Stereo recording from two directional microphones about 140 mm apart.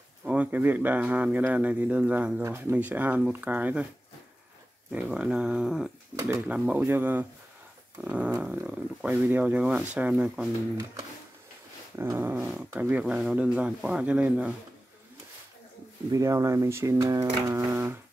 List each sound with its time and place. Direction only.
0.2 s speech: 10° right (ahead or behind)
4.9 s speech: 5° right (ahead or behind)
12.0 s speech: 15° right (ahead or behind)
16.1 s speech: 20° right (ahead or behind)